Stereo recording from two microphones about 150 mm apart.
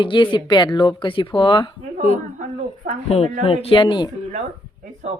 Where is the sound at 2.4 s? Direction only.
60° right (ahead or behind).